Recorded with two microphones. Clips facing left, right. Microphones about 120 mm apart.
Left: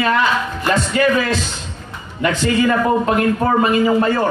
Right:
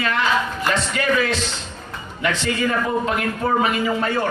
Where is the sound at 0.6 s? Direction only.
45° left (ahead or behind).